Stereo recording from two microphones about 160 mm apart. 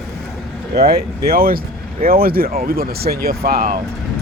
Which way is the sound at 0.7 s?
75° right (ahead or behind).